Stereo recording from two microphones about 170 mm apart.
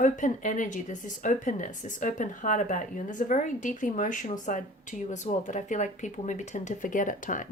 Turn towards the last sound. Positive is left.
turn(degrees=50)  # may be behind; listen again after turning